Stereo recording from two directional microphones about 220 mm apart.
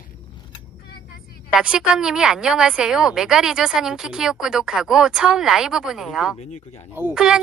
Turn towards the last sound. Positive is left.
turn(degrees=-5)  # may be behind; listen again after turning